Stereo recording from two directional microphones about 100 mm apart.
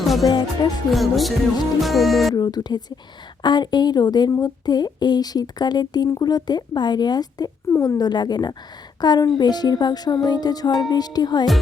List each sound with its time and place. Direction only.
0.0 s music: centre (ahead or behind)
0.3 s speech: 45° left (ahead or behind)
0.9 s music: centre (ahead or behind)
2.3 s speech: 40° left (ahead or behind)